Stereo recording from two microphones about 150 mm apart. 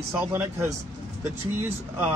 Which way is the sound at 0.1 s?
15° right (ahead or behind).